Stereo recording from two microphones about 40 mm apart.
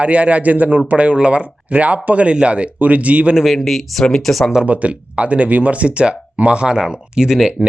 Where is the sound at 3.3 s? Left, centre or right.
Centre.